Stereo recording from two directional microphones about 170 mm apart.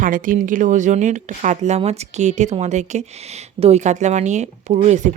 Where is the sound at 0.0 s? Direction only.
50° right (ahead or behind).